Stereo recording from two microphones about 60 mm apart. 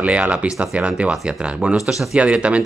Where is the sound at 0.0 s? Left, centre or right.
Right.